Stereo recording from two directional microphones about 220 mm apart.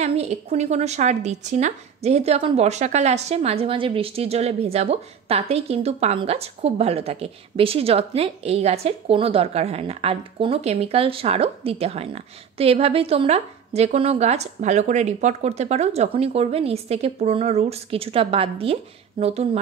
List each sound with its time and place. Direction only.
0.0 s a woman's voice: 30° right (ahead or behind)